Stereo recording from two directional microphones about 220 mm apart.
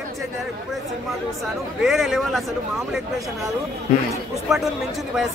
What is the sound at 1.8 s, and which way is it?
Speech, centre (ahead or behind).